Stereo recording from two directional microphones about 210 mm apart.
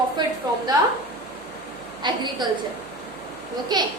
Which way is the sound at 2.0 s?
20° right (ahead or behind).